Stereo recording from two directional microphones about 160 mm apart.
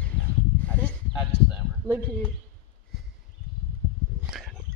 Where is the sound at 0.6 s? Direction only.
10° left (ahead or behind).